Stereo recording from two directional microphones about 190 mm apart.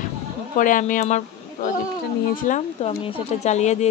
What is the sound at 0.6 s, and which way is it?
Speech, 45° left (ahead or behind).